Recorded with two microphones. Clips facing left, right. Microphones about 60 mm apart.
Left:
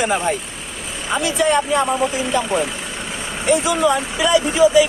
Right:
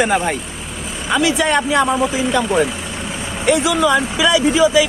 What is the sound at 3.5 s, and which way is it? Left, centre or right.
Speech, right.